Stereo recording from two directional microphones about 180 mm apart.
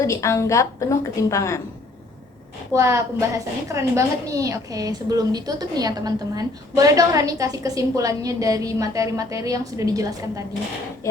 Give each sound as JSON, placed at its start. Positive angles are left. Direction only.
{"t": 0.0, "sound": "a woman's voice", "side_deg": 15}
{"t": 2.7, "sound": "a woman's voice", "side_deg": -15}